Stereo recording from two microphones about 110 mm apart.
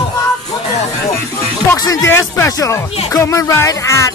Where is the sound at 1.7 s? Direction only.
35° left (ahead or behind).